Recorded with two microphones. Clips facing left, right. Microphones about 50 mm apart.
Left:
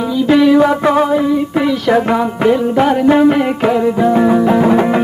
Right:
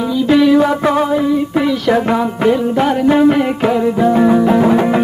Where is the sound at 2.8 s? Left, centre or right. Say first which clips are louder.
Left 2 dB; left.